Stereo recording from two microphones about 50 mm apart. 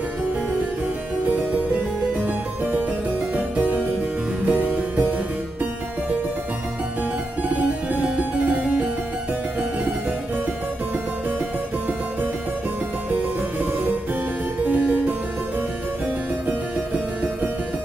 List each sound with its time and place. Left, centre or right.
2.2 s music: right
3.3 s harpsichord: right
4.5 s music: right
7.9 s music: right